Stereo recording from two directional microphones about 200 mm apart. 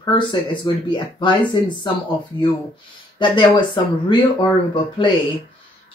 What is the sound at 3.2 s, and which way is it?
Speech, 25° left (ahead or behind).